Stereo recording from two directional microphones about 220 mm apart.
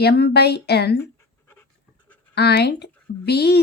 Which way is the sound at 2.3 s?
45° left (ahead or behind).